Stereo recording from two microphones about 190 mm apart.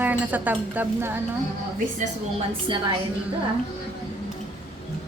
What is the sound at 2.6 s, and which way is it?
Speech, 25° right (ahead or behind).